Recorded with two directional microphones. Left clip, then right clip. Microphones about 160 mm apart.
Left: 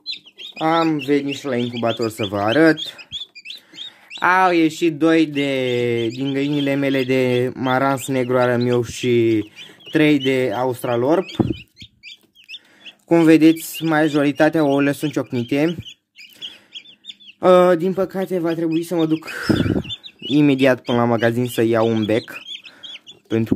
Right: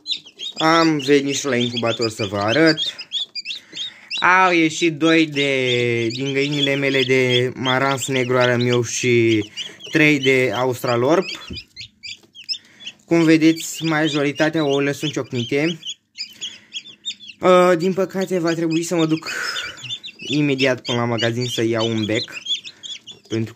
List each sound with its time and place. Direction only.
0.6 s speech: 10° left (ahead or behind)
1.7 s speech: 30° left (ahead or behind)
2.0 s speech: 40° left (ahead or behind); by 11.2 s 25° left (ahead or behind)
13.1 s speech: 50° left (ahead or behind)
17.4 s speech: 40° left (ahead or behind)
18.4 s speech: 20° left (ahead or behind)
19.3 s speech: 30° left (ahead or behind)
20.3 s speech: 50° left (ahead or behind)